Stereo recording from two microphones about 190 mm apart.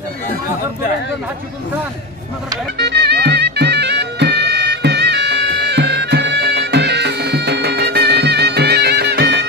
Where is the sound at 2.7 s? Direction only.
60° right (ahead or behind).